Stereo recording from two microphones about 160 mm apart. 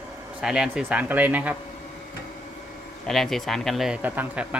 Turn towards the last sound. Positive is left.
turn(degrees=-5)  # may be behind; listen again after turning